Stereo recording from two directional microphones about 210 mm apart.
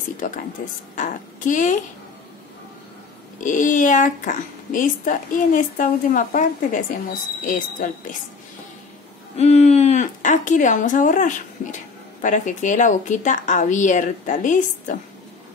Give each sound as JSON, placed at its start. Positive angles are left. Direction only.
{"t": 0.9, "sound": "a woman's voice", "side_deg": 35}
{"t": 3.3, "sound": "a woman's voice", "side_deg": 40}
{"t": 9.4, "sound": "speech", "side_deg": 30}